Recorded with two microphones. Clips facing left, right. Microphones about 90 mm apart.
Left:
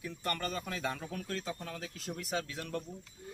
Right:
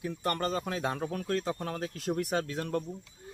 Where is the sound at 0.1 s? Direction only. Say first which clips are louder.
Right 5 dB; 40° right (ahead or behind).